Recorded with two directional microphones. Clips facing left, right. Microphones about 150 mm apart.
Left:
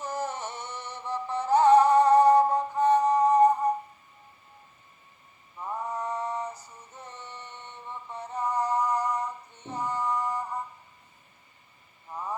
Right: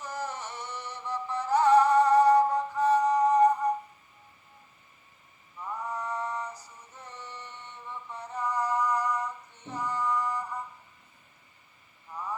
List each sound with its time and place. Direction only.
0.0 s music: 25° left (ahead or behind)
6.0 s female singing: 20° left (ahead or behind)
8.4 s a sound: 20° left (ahead or behind)
9.6 s music: 20° left (ahead or behind)